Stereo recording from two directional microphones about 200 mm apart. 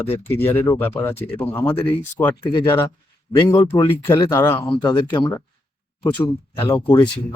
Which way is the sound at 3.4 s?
15° left (ahead or behind).